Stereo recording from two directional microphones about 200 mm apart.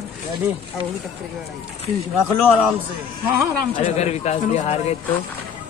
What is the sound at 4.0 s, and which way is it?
Speech, 35° left (ahead or behind).